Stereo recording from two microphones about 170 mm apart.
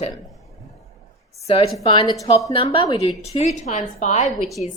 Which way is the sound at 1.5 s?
35° left (ahead or behind).